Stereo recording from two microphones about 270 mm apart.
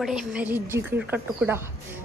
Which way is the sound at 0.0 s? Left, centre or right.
Centre.